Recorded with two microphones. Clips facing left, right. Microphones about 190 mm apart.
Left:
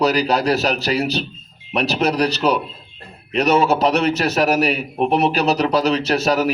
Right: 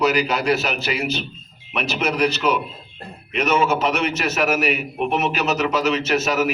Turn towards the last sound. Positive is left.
turn(degrees=35)  # may be behind; listen again after turning